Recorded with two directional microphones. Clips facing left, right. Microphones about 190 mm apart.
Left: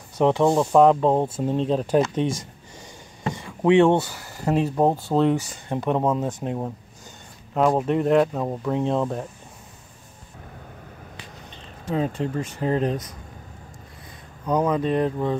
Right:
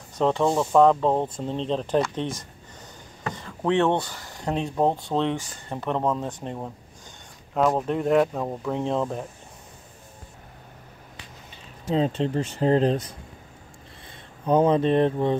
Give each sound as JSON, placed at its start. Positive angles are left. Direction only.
{"t": 0.2, "sound": "speech", "side_deg": 15}
{"t": 7.8, "sound": "speech", "side_deg": 0}
{"t": 11.9, "sound": "speech", "side_deg": -25}
{"t": 14.4, "sound": "speech", "side_deg": -25}